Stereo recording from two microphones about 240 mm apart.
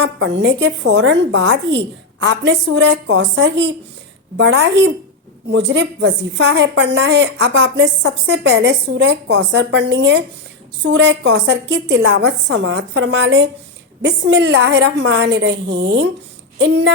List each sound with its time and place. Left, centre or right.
0.0 s a woman's voice: right